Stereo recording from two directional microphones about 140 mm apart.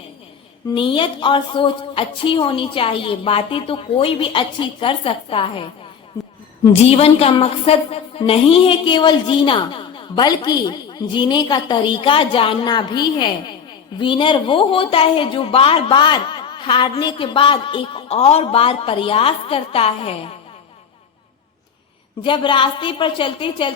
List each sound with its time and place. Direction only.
0.7 s a woman's voice: 35° left (ahead or behind)
6.8 s a woman's voice: 45° left (ahead or behind)
22.2 s a woman's voice: 35° left (ahead or behind)